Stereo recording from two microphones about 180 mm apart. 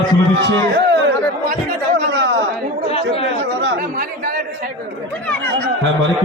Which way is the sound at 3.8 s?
55° right (ahead or behind).